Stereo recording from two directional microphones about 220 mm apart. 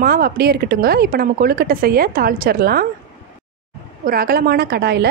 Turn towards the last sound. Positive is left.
turn(degrees=-45)  # may be behind; listen again after turning